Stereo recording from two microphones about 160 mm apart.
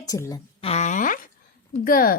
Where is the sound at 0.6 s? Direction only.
40° left (ahead or behind); by 2.1 s 65° left (ahead or behind).